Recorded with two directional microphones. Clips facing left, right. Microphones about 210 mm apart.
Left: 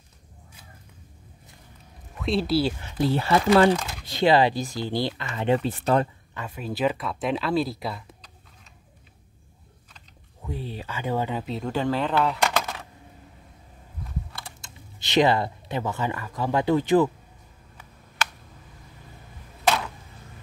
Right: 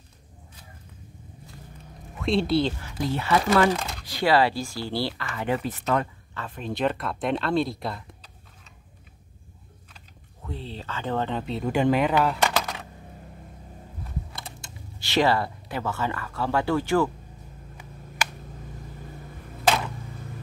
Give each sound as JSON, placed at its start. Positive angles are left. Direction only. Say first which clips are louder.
{"t": 2.1, "sound": "speech", "louder": "right 1 dB", "side_deg": 0}
{"t": 2.8, "sound": "speech", "louder": "left 4 dB", "side_deg": 30}
{"t": 6.3, "sound": "speech", "louder": "even", "side_deg": 10}
{"t": 10.4, "sound": "speech", "louder": "left 2 dB", "side_deg": 10}
{"t": 11.7, "sound": "speech", "louder": "right 3 dB", "side_deg": -15}
{"t": 12.3, "sound": "typing", "louder": "even", "side_deg": 0}
{"t": 15.0, "sound": "speech", "louder": "left 2 dB", "side_deg": 20}
{"t": 17.7, "sound": "a sound", "louder": "even", "side_deg": -10}